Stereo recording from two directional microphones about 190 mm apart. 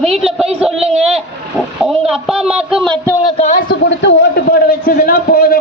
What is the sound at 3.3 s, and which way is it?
Speech, 40° left (ahead or behind).